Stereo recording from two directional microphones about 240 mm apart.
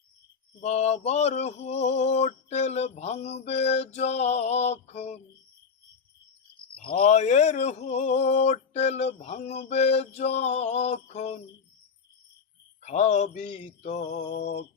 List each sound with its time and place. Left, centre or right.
0.6 s mantra: left
6.8 s mantra: left
12.8 s mantra: left